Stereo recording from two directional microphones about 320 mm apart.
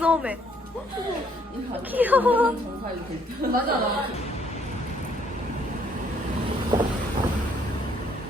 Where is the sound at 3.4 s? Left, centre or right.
Right.